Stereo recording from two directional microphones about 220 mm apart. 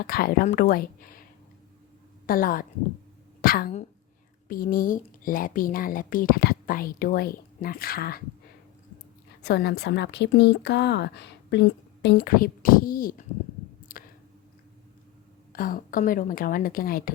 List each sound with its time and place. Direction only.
0.0 s a woman's voice: 40° left (ahead or behind)
2.2 s a woman's voice: 40° left (ahead or behind)
9.4 s speech: 50° left (ahead or behind)
13.9 s a sound: 40° left (ahead or behind)
15.5 s a woman's voice: 40° left (ahead or behind)